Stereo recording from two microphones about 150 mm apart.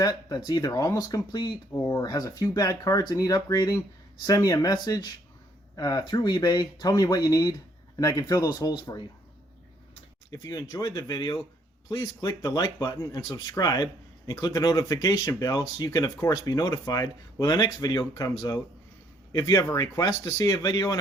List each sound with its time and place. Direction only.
0.0 s speech: 25° left (ahead or behind)
10.3 s speech: 25° left (ahead or behind)